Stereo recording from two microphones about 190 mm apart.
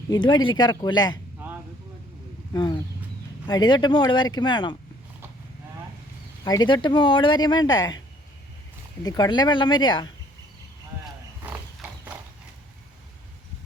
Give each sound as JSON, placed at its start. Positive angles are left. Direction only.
{"t": 0.1, "sound": "speech", "side_deg": 20}
{"t": 2.5, "sound": "speech", "side_deg": 20}
{"t": 6.4, "sound": "speech", "side_deg": 20}
{"t": 9.0, "sound": "speech", "side_deg": 20}
{"t": 11.0, "sound": "horse", "side_deg": -5}